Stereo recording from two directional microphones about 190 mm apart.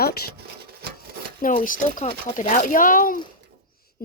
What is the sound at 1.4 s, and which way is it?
Speech, 45° left (ahead or behind).